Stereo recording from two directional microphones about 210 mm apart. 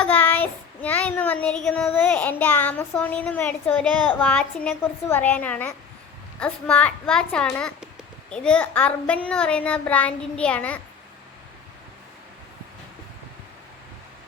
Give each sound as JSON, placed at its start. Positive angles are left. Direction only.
{"t": 0.0, "sound": "child singing", "side_deg": 5}
{"t": 6.4, "sound": "a child's voice", "side_deg": 5}